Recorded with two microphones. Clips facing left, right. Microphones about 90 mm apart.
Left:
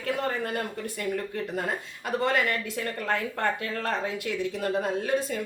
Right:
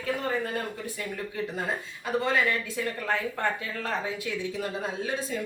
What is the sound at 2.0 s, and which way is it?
A woman's voice, 70° left (ahead or behind).